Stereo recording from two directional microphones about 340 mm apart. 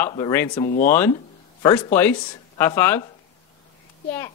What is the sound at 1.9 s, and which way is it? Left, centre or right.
A man's voice, centre.